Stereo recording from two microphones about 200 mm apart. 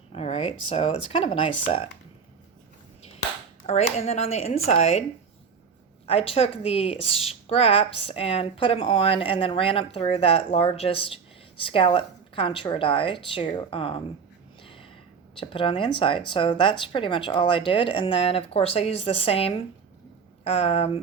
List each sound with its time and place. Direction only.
0.1 s a woman's voice: 30° left (ahead or behind)
3.7 s speech: 35° left (ahead or behind)
6.1 s a woman's voice: 30° left (ahead or behind)
14.6 s a sound: 25° left (ahead or behind)
15.4 s a woman's voice: 25° left (ahead or behind)